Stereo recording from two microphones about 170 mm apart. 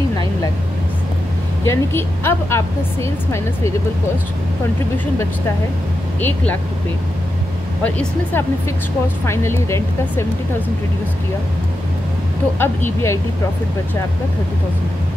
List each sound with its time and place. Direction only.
1.6 s a woman's voice: 15° left (ahead or behind)
6.2 s a woman's voice: 10° left (ahead or behind)
7.8 s a woman's voice: 10° left (ahead or behind)
12.5 s a woman's voice: 15° left (ahead or behind)